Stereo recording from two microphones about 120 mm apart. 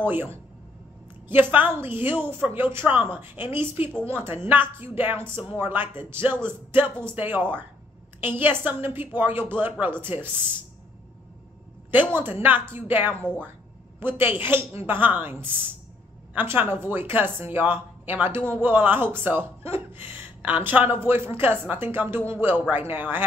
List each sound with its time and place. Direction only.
0.0 s a woman's voice: 15° right (ahead or behind)
11.9 s speech: 15° right (ahead or behind)